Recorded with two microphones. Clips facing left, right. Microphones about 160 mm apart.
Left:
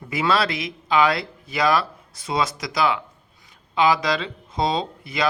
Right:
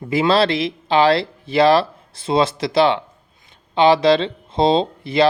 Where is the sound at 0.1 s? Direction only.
25° right (ahead or behind).